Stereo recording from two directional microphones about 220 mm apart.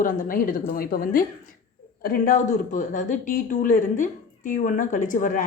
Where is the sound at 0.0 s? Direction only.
40° left (ahead or behind).